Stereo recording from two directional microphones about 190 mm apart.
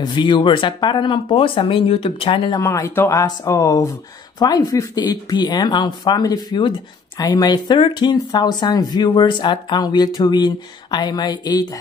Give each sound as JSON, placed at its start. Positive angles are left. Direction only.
{"t": 0.0, "sound": "speech", "side_deg": 25}
{"t": 2.6, "sound": "speech", "side_deg": 15}